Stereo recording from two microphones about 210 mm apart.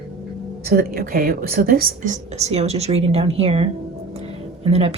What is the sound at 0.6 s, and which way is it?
Speech, 45° right (ahead or behind).